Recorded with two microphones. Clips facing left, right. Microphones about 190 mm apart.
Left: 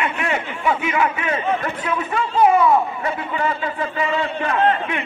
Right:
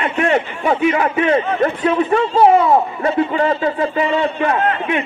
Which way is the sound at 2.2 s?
25° right (ahead or behind).